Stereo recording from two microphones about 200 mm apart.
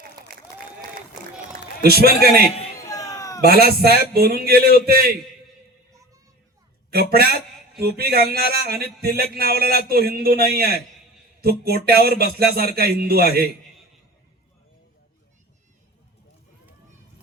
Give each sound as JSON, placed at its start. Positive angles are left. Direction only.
{"t": 0.2, "sound": "applause", "side_deg": -20}
{"t": 1.8, "sound": "speech", "side_deg": -50}
{"t": 2.8, "sound": "a sound", "side_deg": 15}
{"t": 3.4, "sound": "speech", "side_deg": -50}
{"t": 6.9, "sound": "speech", "side_deg": -50}